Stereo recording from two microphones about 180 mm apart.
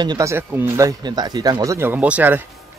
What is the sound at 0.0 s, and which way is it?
Speech, 20° right (ahead or behind).